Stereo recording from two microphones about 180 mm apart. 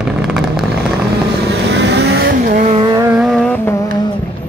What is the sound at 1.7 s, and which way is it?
Vehicle, 70° right (ahead or behind).